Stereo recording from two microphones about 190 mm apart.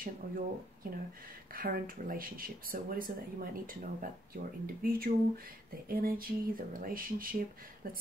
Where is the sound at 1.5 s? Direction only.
50° right (ahead or behind).